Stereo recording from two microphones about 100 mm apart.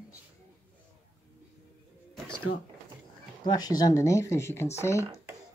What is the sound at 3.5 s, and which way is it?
Speech, 40° left (ahead or behind).